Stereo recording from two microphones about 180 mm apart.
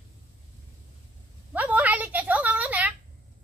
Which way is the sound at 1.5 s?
10° right (ahead or behind).